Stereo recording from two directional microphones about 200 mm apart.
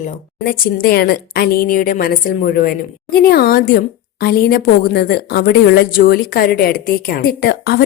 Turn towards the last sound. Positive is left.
turn(degrees=50)  # may be behind; listen again after turning